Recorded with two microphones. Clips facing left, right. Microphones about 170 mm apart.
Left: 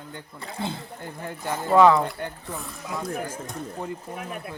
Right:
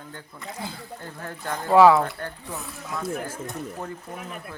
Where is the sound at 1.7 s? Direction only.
5° right (ahead or behind).